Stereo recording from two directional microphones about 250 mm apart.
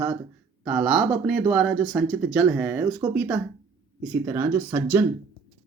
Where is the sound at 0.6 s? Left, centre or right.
Centre.